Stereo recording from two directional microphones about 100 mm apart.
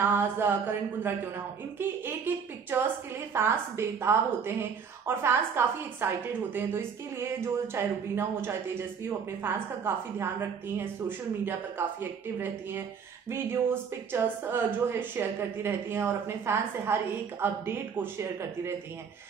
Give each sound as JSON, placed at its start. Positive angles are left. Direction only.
{"t": 0.0, "sound": "speech", "side_deg": -20}